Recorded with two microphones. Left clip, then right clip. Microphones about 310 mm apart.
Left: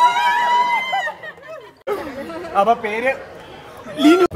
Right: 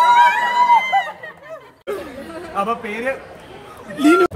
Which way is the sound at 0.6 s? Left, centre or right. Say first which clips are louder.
Right 4 dB; centre.